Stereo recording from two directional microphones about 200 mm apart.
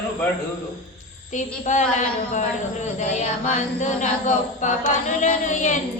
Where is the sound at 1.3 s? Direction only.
35° left (ahead or behind).